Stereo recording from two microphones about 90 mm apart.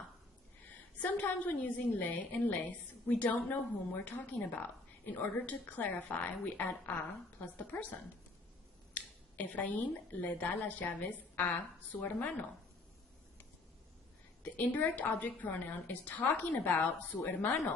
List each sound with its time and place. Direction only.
0.6 s a woman's voice: 15° left (ahead or behind)
9.0 s a woman's voice: 20° left (ahead or behind)
14.5 s a woman's voice: 20° left (ahead or behind)